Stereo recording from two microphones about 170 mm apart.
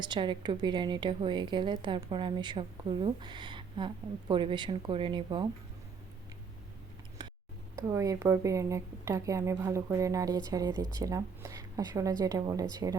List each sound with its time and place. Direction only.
0.0 s a woman's voice: 25° right (ahead or behind)
7.2 s a sound: 25° right (ahead or behind)
7.8 s a woman's voice: 20° right (ahead or behind)